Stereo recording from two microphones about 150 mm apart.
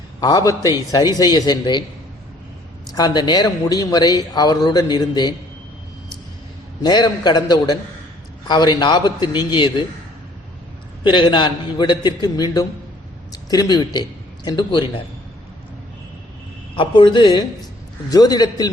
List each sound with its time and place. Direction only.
0.2 s a man's voice: 25° left (ahead or behind)
2.8 s a man's voice: 25° left (ahead or behind)
6.8 s a man's voice: 30° left (ahead or behind)
11.0 s a man's voice: 30° left (ahead or behind)
16.7 s a man's voice: 35° left (ahead or behind)